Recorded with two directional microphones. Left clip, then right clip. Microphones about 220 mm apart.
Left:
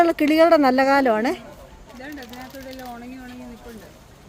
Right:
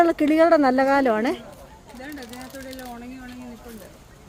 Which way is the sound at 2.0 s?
50° right (ahead or behind).